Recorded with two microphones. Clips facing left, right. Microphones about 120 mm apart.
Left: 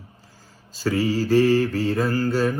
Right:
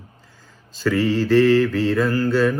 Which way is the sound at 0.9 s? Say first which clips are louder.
Right 2 dB; 55° right (ahead or behind).